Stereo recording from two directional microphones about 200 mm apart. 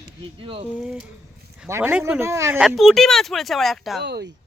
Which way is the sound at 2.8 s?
Centre (ahead or behind).